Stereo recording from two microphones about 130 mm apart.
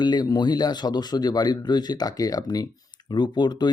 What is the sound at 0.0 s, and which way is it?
Speech, 35° left (ahead or behind).